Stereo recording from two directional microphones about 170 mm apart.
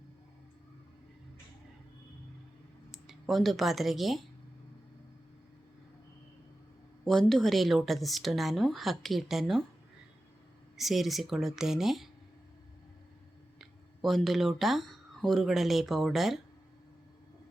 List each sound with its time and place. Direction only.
2.9 s speech: centre (ahead or behind)
7.0 s speech: centre (ahead or behind)
10.8 s speech: centre (ahead or behind)
13.6 s speech: centre (ahead or behind)